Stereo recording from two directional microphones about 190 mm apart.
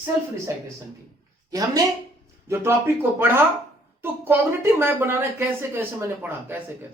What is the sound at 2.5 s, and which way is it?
Speech, 10° right (ahead or behind).